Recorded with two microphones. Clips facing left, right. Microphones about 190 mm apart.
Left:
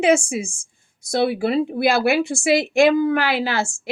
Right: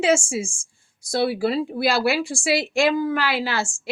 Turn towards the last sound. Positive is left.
turn(degrees=20)  # may be behind; listen again after turning